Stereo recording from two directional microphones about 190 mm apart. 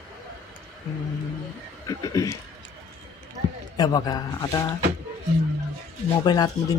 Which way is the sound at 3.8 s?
20° left (ahead or behind).